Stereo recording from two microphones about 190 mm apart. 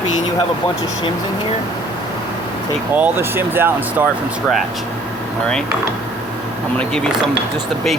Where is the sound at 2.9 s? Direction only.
10° right (ahead or behind).